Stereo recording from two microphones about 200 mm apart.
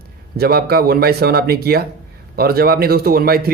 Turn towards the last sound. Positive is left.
turn(degrees=-50)  # may be behind; listen again after turning